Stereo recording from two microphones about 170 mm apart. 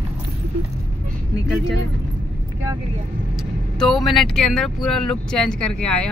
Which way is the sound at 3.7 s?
Centre (ahead or behind).